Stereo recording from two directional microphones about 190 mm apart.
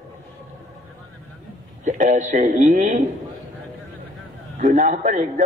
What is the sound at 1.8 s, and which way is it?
A man's voice, 40° right (ahead or behind).